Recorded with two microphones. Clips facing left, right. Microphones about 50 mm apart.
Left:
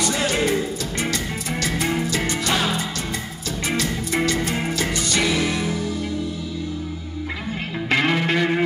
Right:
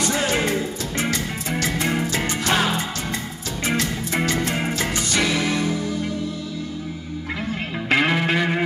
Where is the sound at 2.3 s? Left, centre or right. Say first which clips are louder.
Right 1 dB; right.